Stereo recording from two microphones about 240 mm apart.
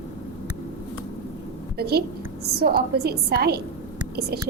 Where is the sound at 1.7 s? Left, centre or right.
Right.